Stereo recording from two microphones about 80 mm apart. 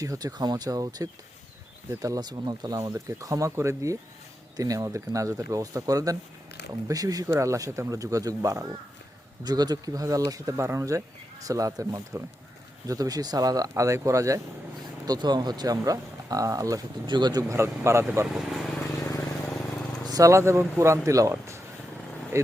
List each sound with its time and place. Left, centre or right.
0.0 s speech: right
2.9 s speech: right
9.4 s speech: right
15.0 s speech: right
15.8 s speech: right
17.1 s speech: right
17.5 s speech: right
18.3 s vehicle: centre
20.1 s vehicle: right
20.3 s speech: right